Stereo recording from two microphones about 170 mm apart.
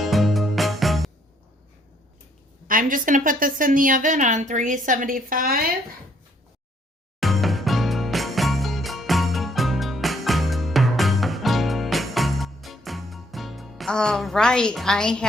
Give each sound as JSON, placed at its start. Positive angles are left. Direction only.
{"t": 0.0, "sound": "music", "side_deg": 0}
{"t": 2.6, "sound": "a woman's voice", "side_deg": -55}
{"t": 7.2, "sound": "music", "side_deg": 0}